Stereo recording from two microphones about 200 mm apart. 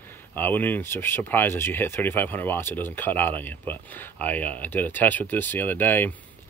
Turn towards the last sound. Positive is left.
turn(degrees=10)  # may be behind; listen again after turning